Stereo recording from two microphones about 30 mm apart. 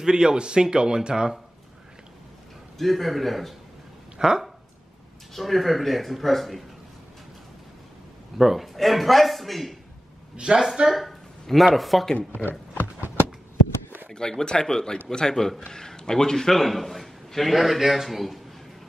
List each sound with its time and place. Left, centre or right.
0.0 s speech: right
2.8 s speech: centre
4.2 s speech: right
5.3 s speech: centre
8.4 s a man's voice: centre
10.3 s speech: right
10.9 s speech: centre
14.1 s a man's voice: left; by 18.4 s centre